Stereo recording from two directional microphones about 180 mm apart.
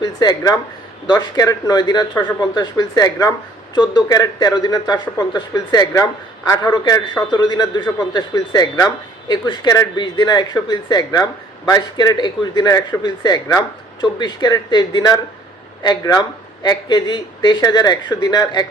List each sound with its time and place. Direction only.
0.0 s speech: 20° left (ahead or behind)